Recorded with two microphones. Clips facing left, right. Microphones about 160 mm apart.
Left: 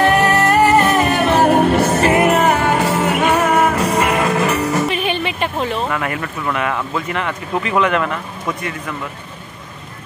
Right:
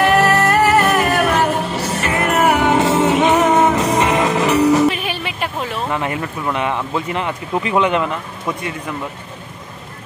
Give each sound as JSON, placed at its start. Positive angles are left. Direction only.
{"t": 0.0, "sound": "music", "side_deg": 20}
{"t": 1.5, "sound": "music", "side_deg": 60}
{"t": 2.4, "sound": "music", "side_deg": -15}
{"t": 4.8, "sound": "music", "side_deg": -5}
{"t": 5.9, "sound": "speech", "side_deg": -25}